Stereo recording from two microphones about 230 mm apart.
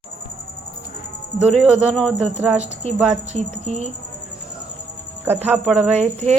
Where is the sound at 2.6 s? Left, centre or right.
Right.